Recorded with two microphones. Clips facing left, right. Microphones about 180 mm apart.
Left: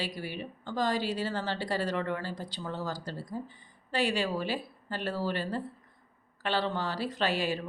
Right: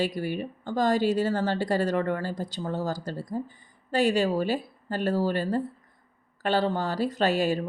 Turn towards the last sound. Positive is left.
turn(degrees=-45)  # may be behind; listen again after turning